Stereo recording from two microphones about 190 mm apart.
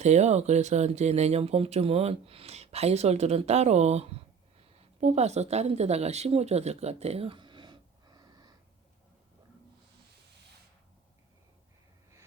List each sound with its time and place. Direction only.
0.0 s speech: 35° right (ahead or behind); by 8.5 s 20° right (ahead or behind)